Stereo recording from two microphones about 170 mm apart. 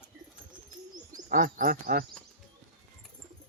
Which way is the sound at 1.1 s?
55° right (ahead or behind).